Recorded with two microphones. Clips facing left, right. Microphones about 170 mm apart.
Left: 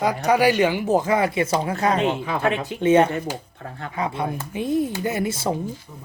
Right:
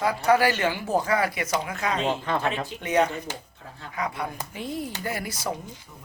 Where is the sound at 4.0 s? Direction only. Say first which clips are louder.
Left 5 dB; 25° left (ahead or behind).